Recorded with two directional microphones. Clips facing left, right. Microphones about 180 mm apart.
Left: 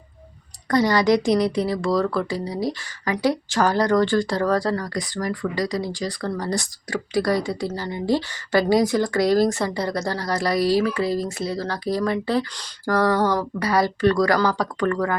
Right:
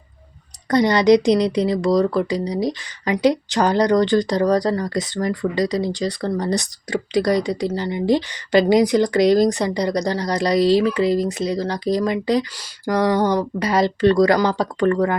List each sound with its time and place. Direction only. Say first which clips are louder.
0.7 s speech: right 4 dB; 20° right (ahead or behind)